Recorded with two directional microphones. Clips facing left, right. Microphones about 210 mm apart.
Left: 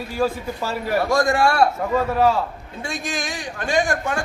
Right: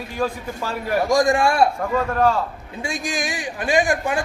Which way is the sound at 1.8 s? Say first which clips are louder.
Left 1 dB; 5° left (ahead or behind).